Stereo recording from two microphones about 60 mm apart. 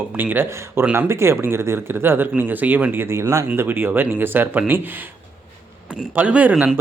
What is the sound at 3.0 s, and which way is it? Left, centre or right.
Speech, right.